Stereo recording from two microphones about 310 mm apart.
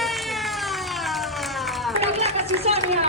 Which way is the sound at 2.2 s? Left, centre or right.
Centre.